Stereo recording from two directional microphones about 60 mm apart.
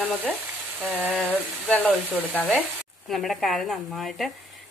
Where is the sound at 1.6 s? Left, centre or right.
Left.